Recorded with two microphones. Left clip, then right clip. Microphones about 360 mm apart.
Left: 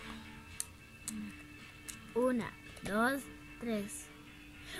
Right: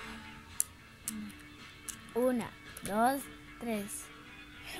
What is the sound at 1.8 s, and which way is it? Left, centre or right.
Music, centre.